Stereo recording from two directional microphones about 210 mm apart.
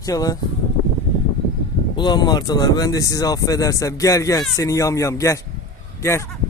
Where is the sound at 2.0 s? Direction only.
20° left (ahead or behind).